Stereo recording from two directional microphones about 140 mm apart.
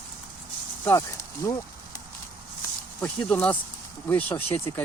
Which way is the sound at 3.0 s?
10° left (ahead or behind).